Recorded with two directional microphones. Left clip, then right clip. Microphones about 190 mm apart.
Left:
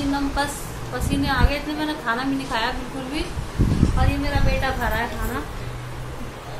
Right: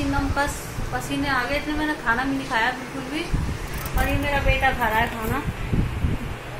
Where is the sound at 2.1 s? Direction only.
Centre (ahead or behind).